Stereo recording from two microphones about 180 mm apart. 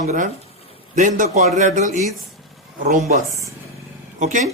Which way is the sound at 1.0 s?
45° right (ahead or behind).